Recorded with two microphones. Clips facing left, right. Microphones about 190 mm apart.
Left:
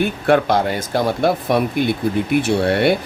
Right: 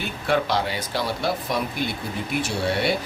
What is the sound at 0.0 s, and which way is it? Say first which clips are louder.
Speech: left 8 dB; 55° left (ahead or behind).